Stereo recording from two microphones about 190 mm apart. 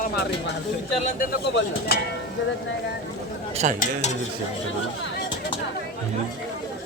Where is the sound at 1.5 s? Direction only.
60° left (ahead or behind).